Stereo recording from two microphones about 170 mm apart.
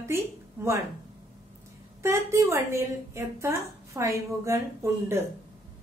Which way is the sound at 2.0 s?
15° right (ahead or behind).